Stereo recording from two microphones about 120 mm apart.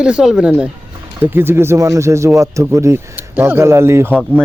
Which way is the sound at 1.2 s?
20° right (ahead or behind).